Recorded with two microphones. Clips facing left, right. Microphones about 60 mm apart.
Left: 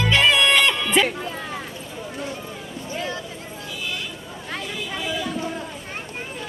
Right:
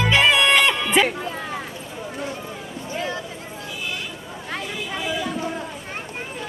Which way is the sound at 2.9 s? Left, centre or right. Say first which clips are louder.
Right 1 dB; centre.